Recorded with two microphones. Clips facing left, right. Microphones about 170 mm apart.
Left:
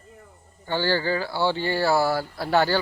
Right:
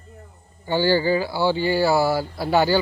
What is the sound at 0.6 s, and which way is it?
Speech, 10° right (ahead or behind).